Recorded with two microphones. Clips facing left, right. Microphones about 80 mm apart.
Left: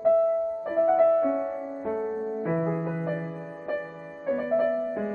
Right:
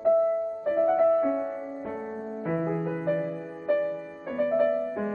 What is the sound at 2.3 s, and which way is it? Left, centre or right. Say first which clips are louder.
Music: right 2 dB; centre.